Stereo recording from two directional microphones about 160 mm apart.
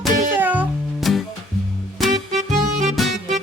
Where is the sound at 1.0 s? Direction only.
Centre (ahead or behind).